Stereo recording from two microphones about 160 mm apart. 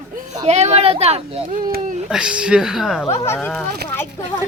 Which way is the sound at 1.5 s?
60° right (ahead or behind).